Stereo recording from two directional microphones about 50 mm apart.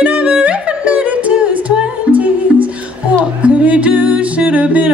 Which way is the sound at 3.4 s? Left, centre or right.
Right.